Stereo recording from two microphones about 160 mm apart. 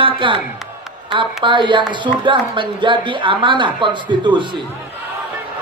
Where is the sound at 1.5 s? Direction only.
30° right (ahead or behind).